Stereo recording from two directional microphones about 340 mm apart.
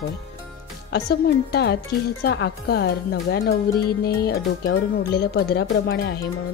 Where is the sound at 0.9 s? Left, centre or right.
Left.